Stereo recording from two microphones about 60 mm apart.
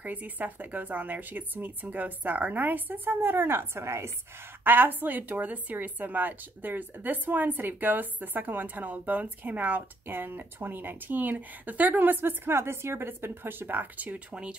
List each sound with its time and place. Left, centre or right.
0.0 s speech: right
4.6 s speech: right; by 14.6 s centre